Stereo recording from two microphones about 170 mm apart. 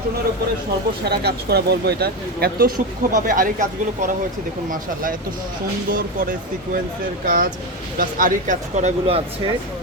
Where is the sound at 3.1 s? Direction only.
55° right (ahead or behind).